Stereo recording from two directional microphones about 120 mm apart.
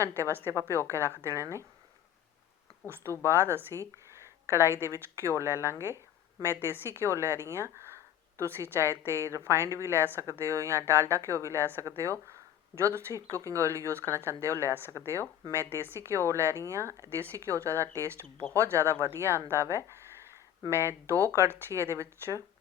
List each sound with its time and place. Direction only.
0.2 s a woman's voice: 20° right (ahead or behind)
3.2 s a woman's voice: 20° right (ahead or behind)
12.3 s a sound: 20° right (ahead or behind)
13.4 s a woman's voice: 25° right (ahead or behind)